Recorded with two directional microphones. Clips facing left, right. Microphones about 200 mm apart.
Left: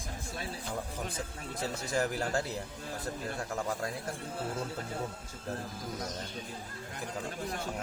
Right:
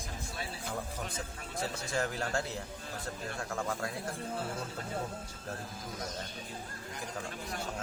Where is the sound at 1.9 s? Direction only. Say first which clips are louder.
Left 3 dB; 20° left (ahead or behind).